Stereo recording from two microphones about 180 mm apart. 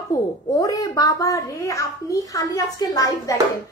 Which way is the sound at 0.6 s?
20° left (ahead or behind).